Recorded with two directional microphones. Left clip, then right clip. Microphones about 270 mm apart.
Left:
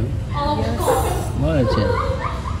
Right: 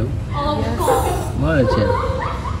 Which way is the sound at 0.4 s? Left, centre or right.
Centre.